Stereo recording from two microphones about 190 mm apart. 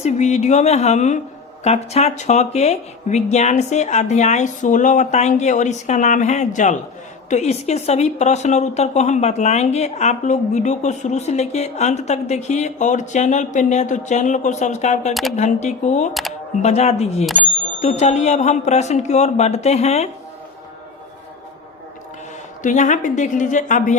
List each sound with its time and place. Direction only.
0.0 s a woman's voice: 35° left (ahead or behind)
22.6 s a woman's voice: 40° left (ahead or behind)